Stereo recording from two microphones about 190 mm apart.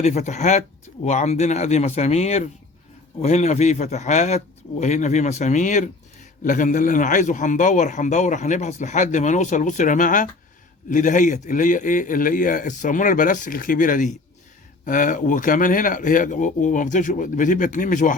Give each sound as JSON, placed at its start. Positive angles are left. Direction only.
{"t": 0.0, "sound": "a man's voice", "side_deg": 35}